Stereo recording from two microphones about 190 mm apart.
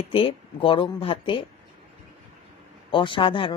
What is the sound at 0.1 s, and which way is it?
Speech, 30° left (ahead or behind).